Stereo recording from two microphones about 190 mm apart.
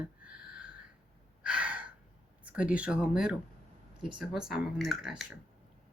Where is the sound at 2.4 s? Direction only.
5° right (ahead or behind).